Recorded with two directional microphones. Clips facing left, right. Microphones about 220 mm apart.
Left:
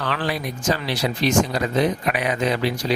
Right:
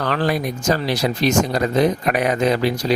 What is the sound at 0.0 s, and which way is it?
Speech, 45° right (ahead or behind).